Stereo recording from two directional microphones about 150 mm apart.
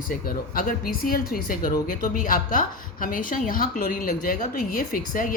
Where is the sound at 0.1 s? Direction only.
70° left (ahead or behind).